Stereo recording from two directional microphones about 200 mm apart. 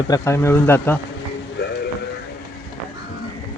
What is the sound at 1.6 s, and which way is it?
Music, 55° left (ahead or behind).